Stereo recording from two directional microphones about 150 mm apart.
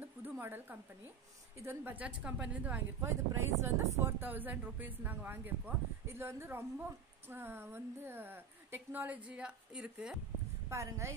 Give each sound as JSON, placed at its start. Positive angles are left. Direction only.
{"t": 0.0, "sound": "a sound", "side_deg": -15}
{"t": 1.6, "sound": "a woman's voice", "side_deg": -15}
{"t": 10.7, "sound": "speech", "side_deg": -20}